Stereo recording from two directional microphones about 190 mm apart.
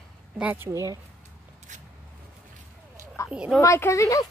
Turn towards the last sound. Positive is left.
turn(degrees=15)  # may be behind; listen again after turning